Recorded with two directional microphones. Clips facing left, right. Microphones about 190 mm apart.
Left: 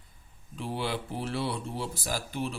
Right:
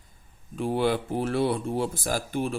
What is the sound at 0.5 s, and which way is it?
Speech, 50° right (ahead or behind).